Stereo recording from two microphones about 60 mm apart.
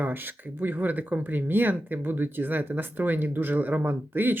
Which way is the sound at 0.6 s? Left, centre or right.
Right.